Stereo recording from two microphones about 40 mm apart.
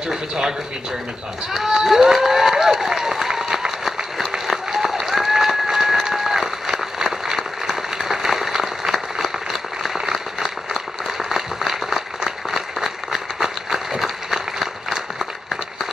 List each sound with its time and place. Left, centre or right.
0.1 s speech: centre
3.3 s applause: centre